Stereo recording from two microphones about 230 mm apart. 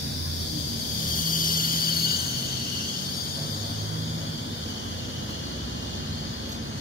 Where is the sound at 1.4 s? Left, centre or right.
Left.